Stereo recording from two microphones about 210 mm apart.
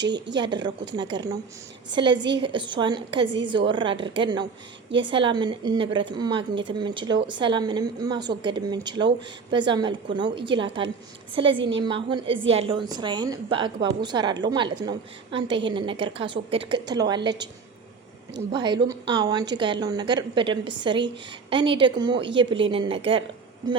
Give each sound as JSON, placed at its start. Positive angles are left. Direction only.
{"t": 0.3, "sound": "a woman's voice", "side_deg": -20}
{"t": 18.5, "sound": "a woman's voice", "side_deg": -20}